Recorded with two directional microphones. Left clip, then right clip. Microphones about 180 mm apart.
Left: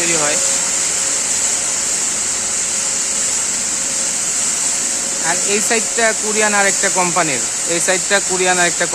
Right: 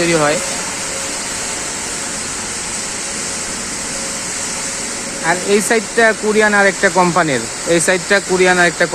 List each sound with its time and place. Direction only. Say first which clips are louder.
0.1 s speech: right 5 dB; 30° right (ahead or behind)
5.3 s speech: right 4 dB; 15° right (ahead or behind)